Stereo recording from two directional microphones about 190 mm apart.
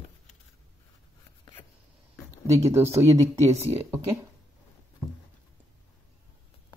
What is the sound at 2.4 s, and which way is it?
Speech, 15° right (ahead or behind).